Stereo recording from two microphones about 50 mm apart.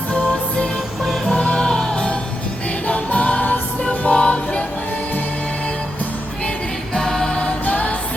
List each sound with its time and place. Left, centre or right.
0.1 s music: left
1.0 s music: centre
1.4 s music: centre
2.8 s music: left
6.9 s choir: centre
7.6 s music: left